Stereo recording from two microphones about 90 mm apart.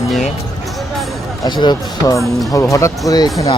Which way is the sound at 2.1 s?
40° left (ahead or behind).